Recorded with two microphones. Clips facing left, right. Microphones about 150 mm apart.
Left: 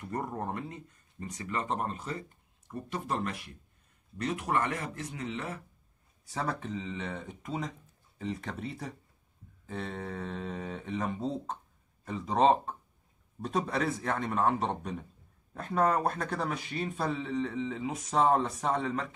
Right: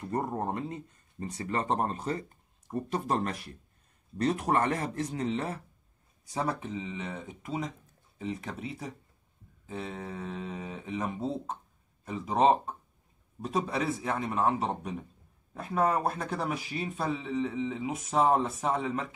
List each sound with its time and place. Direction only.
0.0 s speech: 25° right (ahead or behind)
6.2 s speech: 15° right (ahead or behind)